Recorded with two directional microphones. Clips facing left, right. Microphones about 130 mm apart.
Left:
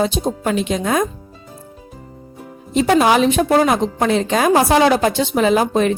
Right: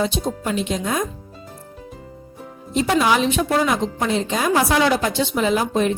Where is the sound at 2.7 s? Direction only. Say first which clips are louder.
Left 4 dB; 55° left (ahead or behind).